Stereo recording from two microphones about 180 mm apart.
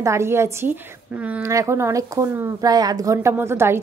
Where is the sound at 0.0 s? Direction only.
15° right (ahead or behind).